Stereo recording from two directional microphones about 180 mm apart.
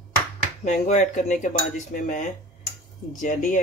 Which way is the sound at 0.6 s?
40° left (ahead or behind).